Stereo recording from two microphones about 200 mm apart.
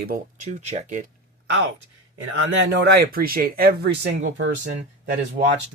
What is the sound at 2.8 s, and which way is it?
Speech, 50° right (ahead or behind).